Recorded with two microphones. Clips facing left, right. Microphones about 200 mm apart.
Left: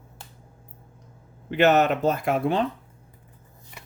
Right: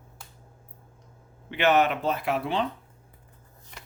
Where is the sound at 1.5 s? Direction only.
40° left (ahead or behind).